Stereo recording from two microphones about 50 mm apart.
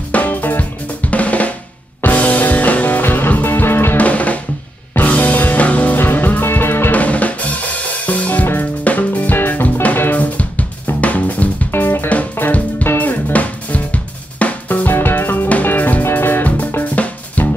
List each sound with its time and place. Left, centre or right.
0.1 s music: left
1.1 s drum: left
2.0 s music: left
3.9 s music: left
6.9 s drum kit: left
8.1 s music: left
11.0 s drum kit: left
11.7 s music: left
12.4 s music: left
12.8 s music: left
13.3 s drum kit: left
15.0 s music: left
16.9 s music: left